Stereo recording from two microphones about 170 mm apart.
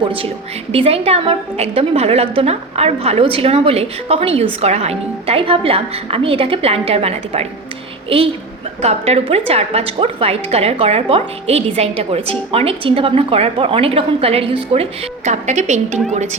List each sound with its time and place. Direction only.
0.7 s a woman's voice: 35° right (ahead or behind)
8.8 s a woman's voice: 40° right (ahead or behind)